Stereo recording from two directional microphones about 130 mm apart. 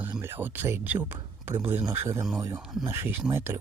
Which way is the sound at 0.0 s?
15° right (ahead or behind).